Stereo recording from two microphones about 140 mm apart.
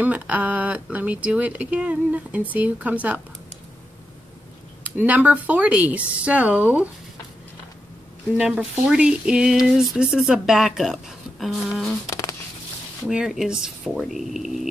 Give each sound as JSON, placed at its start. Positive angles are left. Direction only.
{"t": 0.0, "sound": "speech", "side_deg": -10}
{"t": 4.8, "sound": "speech", "side_deg": -10}
{"t": 8.4, "sound": "speech", "side_deg": -5}
{"t": 12.1, "sound": "a sound", "side_deg": 25}
{"t": 13.1, "sound": "speech", "side_deg": -5}